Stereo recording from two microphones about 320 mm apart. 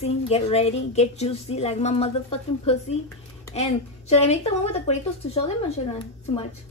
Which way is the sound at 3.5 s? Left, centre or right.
Centre.